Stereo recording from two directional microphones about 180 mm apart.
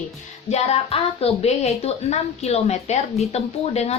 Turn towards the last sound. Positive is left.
turn(degrees=35)  # may be behind; listen again after turning